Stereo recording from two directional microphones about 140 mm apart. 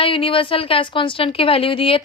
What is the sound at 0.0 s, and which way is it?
A woman's voice, 40° left (ahead or behind).